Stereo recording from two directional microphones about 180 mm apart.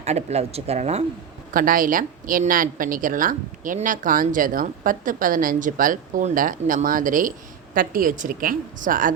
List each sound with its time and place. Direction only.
0.0 s speech: 35° right (ahead or behind)
1.5 s a woman's voice: 50° right (ahead or behind)